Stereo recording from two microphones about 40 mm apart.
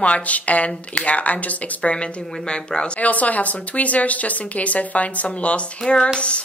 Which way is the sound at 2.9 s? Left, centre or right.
Left.